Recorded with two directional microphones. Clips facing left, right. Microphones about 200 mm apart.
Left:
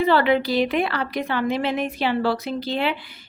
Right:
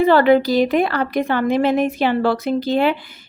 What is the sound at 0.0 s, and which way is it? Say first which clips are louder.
A woman's voice: right 6 dB; 45° right (ahead or behind).